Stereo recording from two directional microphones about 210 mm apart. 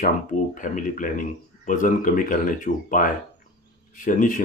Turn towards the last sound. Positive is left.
turn(degrees=35)  # may be behind; listen again after turning